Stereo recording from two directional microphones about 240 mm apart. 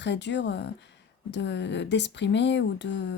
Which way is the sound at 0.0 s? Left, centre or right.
Left.